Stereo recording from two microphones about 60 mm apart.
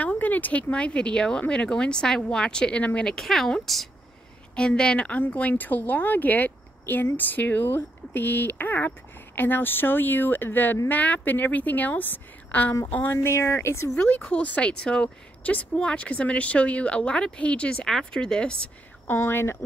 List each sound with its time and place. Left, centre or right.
0.0 s a woman's voice: left
3.1 s speech: centre
4.6 s a woman's voice: centre; by 13.2 s left
13.2 s speech: left
13.9 s a woman's voice: left
17.8 s speech: centre
19.1 s speech: left